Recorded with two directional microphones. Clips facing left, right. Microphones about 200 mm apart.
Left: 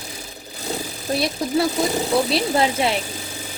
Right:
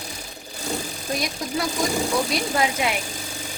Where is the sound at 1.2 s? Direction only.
30° left (ahead or behind).